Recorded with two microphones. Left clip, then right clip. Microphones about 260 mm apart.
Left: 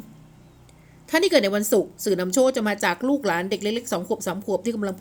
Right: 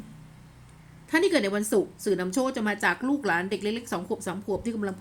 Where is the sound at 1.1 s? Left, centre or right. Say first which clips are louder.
Left 5 dB; centre.